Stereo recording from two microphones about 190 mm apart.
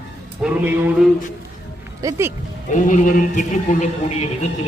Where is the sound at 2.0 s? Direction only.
15° right (ahead or behind).